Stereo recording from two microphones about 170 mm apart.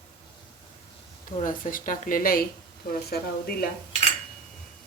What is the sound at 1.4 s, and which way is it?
Speech, 50° left (ahead or behind).